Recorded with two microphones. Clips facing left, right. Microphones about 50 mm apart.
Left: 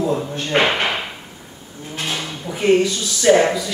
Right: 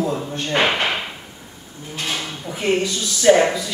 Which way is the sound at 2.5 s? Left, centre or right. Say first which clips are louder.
Left 3 dB; centre.